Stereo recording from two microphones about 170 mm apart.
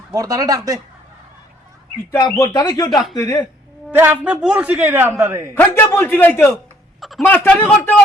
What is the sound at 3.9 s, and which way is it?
A man's voice, 10° right (ahead or behind).